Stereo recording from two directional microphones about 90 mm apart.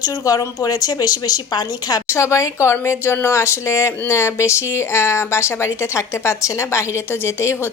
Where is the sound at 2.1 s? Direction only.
35° left (ahead or behind).